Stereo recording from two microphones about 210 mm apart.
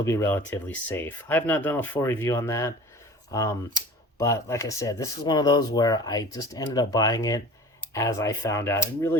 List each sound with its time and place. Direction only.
0.0 s speech: 15° left (ahead or behind)